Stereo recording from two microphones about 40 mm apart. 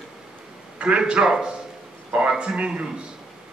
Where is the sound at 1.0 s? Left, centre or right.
Centre.